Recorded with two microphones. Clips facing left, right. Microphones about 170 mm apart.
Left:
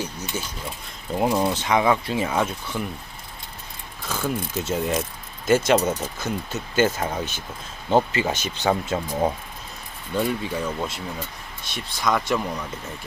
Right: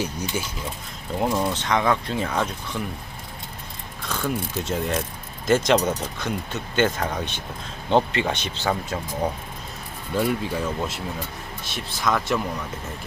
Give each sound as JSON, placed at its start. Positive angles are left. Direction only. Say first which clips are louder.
{"t": 0.0, "sound": "speech", "louder": "right 3 dB", "side_deg": -10}
{"t": 1.3, "sound": "speech", "louder": "left 2 dB", "side_deg": 10}
{"t": 4.1, "sound": "speech", "louder": "even", "side_deg": 5}
{"t": 8.5, "sound": "speech", "louder": "left 3 dB", "side_deg": 20}
{"t": 10.2, "sound": "speech", "louder": "right 1 dB", "side_deg": 0}